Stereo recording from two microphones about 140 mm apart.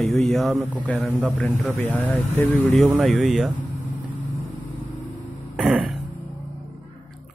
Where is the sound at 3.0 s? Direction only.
Centre (ahead or behind).